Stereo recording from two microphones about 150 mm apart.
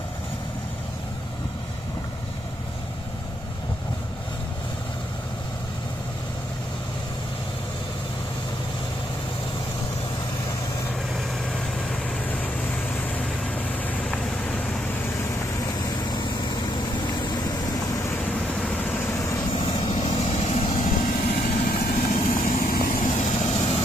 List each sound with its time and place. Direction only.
11.9 s vehicle: 10° left (ahead or behind)
15.6 s vehicle: 25° left (ahead or behind); by 20.6 s 45° left (ahead or behind)
20.6 s vehicle: 60° left (ahead or behind); by 23.8 s 40° left (ahead or behind)